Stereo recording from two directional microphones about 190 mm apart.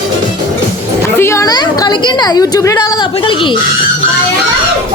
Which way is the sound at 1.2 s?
15° left (ahead or behind).